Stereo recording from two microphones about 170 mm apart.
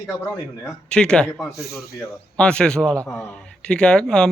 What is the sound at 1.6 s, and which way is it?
Speech, 65° left (ahead or behind).